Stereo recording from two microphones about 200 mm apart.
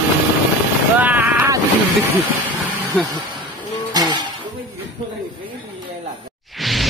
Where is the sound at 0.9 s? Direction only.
10° right (ahead or behind).